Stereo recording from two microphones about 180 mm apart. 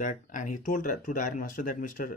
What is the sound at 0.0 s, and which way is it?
Speech, 45° left (ahead or behind).